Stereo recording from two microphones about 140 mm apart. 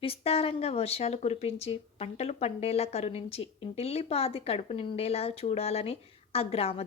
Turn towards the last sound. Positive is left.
turn(degrees=45)  # may be behind; listen again after turning